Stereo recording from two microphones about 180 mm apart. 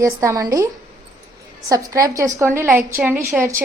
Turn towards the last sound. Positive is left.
turn(degrees=-10)  # may be behind; listen again after turning